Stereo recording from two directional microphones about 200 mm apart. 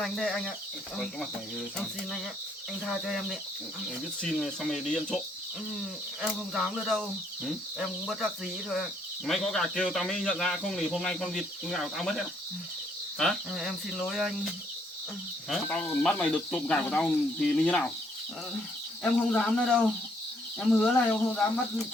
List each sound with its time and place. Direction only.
0.0 s speech: 5° left (ahead or behind)
2.8 s speech: centre (ahead or behind)
6.2 s speech: centre (ahead or behind)
15.4 s speech: 5° left (ahead or behind)
19.3 s speech: 5° left (ahead or behind)